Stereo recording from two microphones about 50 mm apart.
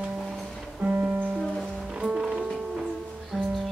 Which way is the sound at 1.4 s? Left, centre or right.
Centre.